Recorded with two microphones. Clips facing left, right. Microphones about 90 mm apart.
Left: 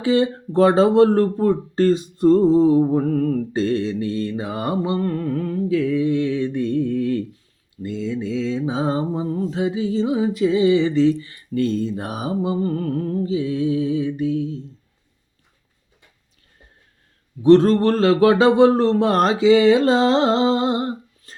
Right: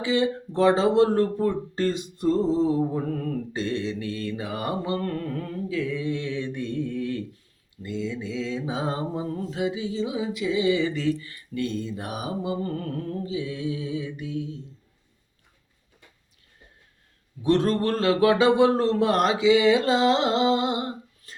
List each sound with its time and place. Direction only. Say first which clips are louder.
0.0 s speech: left 5 dB; 40° left (ahead or behind)
17.4 s speech: left 9 dB; 35° left (ahead or behind)